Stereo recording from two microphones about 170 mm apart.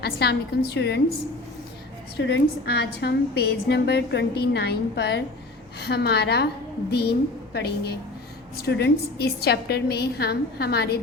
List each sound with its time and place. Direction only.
0.0 s a woman's voice: 75° left (ahead or behind)
2.1 s a woman's voice: 80° left